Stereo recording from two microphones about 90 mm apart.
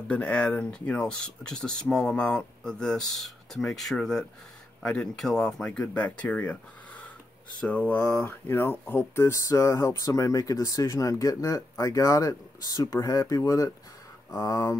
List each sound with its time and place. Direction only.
0.1 s speech: 15° left (ahead or behind)
7.6 s speech: 15° left (ahead or behind); by 14.8 s 35° left (ahead or behind)